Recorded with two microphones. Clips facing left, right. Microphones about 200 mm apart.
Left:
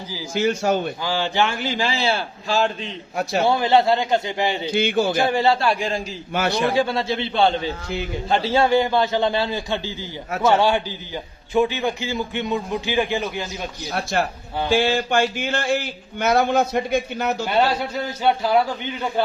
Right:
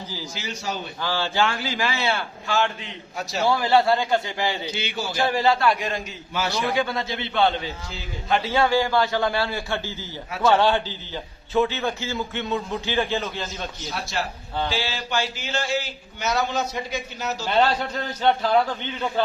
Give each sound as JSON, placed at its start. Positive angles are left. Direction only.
{"t": 0.3, "sound": "a man's voice", "side_deg": 50}
{"t": 1.0, "sound": "a man's voice", "side_deg": 15}
{"t": 4.7, "sound": "a man's voice", "side_deg": 50}
{"t": 5.2, "sound": "a man's voice", "side_deg": 25}
{"t": 6.3, "sound": "speech", "side_deg": 55}
{"t": 6.7, "sound": "a man's voice", "side_deg": 25}
{"t": 13.9, "sound": "a man's voice", "side_deg": 55}
{"t": 17.5, "sound": "speech", "side_deg": 10}